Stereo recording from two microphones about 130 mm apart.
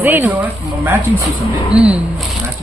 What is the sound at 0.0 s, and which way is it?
Speech, 15° right (ahead or behind).